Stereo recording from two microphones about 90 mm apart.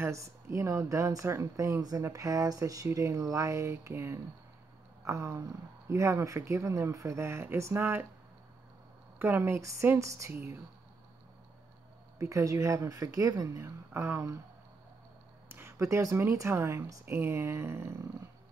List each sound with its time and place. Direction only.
0.0 s speech: 35° right (ahead or behind)
1.8 s speech: 45° right (ahead or behind)
5.0 s a sound: 35° right (ahead or behind)
5.9 s speech: 35° right (ahead or behind)
9.2 s speech: 25° right (ahead or behind)
10.3 s speech: 25° right (ahead or behind)
12.2 s speech: 35° right (ahead or behind)
15.4 s speech: 25° right (ahead or behind)